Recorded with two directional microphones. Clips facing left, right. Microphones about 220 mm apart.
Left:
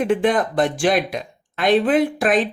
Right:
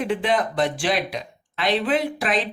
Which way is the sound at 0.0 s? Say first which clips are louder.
Left 5 dB; 50° left (ahead or behind).